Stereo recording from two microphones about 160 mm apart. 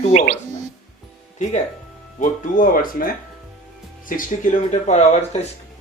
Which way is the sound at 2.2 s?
55° left (ahead or behind).